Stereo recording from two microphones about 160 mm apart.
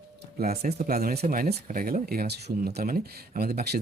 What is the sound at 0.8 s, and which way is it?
A man's voice, 70° right (ahead or behind).